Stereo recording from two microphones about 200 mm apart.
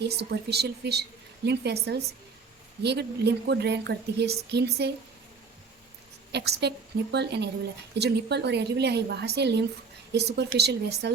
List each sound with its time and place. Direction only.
0.0 s speech: 55° right (ahead or behind)
6.3 s speech: 55° right (ahead or behind)